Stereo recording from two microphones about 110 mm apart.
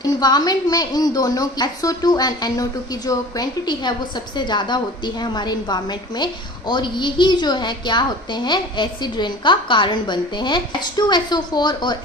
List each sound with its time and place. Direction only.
0.0 s a woman's voice: 40° left (ahead or behind)